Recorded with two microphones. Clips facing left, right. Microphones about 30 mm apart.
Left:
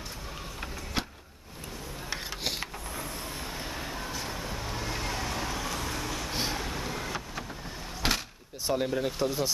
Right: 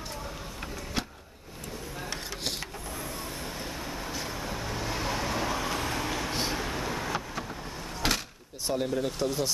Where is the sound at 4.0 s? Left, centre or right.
Centre.